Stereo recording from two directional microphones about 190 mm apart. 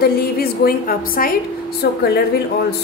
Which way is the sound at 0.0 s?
50° left (ahead or behind).